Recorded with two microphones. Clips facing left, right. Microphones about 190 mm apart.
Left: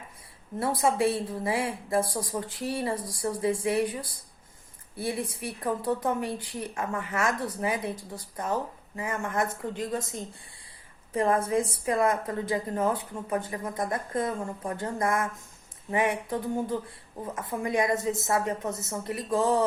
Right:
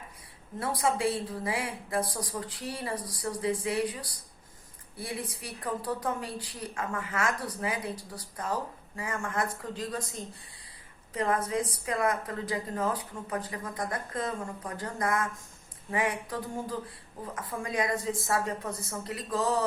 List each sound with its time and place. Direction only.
0.6 s a woman's voice: 25° left (ahead or behind)